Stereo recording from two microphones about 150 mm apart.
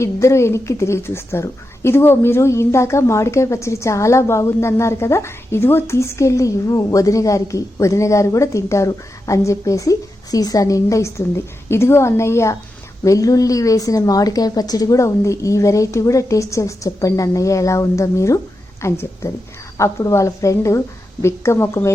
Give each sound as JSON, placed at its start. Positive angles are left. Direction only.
{"t": 0.0, "sound": "a woman's voice", "side_deg": 20}